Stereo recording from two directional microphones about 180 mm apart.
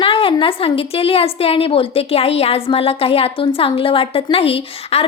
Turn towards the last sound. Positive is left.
turn(degrees=35)  # may be behind; listen again after turning